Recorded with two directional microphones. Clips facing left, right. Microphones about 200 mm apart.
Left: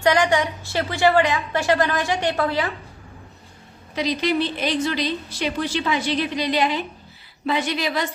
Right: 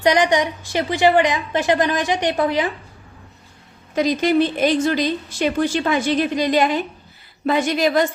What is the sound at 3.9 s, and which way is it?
A woman's voice, 50° right (ahead or behind).